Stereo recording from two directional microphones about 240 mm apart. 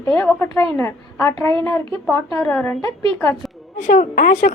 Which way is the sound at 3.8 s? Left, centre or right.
Left.